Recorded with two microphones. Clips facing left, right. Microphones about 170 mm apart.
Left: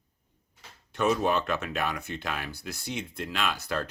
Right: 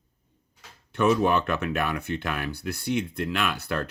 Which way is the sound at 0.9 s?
60° right (ahead or behind).